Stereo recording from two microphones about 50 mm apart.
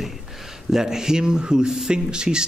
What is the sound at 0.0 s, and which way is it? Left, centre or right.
Speech, centre.